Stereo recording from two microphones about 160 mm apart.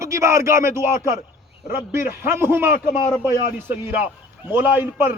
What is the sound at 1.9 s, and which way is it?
Speech, 15° right (ahead or behind).